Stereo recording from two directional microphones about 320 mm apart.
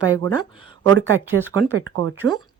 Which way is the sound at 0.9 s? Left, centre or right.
Right.